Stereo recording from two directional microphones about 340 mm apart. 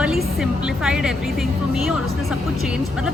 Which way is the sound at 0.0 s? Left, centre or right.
Centre.